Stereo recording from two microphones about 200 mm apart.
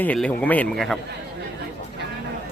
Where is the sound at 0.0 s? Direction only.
5° left (ahead or behind).